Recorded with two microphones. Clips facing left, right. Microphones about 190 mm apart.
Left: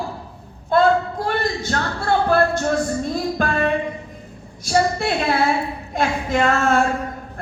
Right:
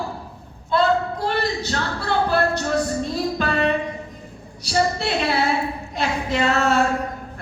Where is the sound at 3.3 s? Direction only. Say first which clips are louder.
Even; 50° left (ahead or behind).